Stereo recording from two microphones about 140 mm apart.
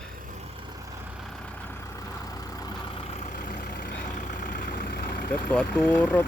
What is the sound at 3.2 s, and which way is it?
Vehicle, 75° left (ahead or behind).